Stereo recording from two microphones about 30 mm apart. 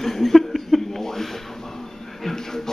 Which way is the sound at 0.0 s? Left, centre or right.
Centre.